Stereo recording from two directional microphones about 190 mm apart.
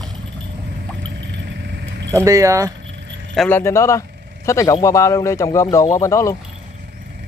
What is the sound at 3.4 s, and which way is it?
A man's voice, 10° left (ahead or behind).